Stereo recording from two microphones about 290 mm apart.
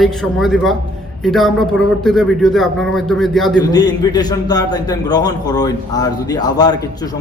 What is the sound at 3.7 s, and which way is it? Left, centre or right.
A man's voice, centre.